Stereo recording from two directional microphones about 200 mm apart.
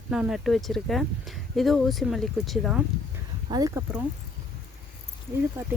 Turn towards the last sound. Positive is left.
turn(degrees=-15)  # may be behind; listen again after turning